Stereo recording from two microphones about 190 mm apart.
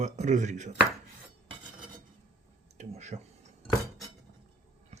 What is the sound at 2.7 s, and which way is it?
Speech, 35° right (ahead or behind).